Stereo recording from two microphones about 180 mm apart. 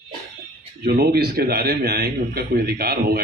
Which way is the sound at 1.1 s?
60° right (ahead or behind).